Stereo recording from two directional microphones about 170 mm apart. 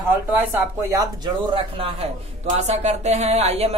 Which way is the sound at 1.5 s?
35° right (ahead or behind).